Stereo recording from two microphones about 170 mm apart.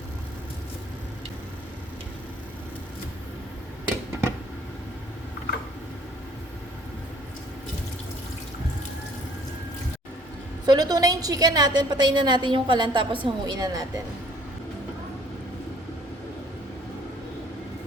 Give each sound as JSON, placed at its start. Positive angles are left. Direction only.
{"t": 10.7, "sound": "a woman's voice", "side_deg": -25}